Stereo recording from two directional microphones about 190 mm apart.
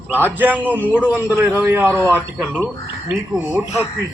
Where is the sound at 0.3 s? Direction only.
10° right (ahead or behind).